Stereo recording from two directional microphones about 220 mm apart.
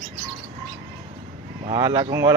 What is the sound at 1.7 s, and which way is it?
Speech, 20° right (ahead or behind).